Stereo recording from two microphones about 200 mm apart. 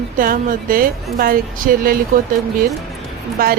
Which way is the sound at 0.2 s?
45° right (ahead or behind).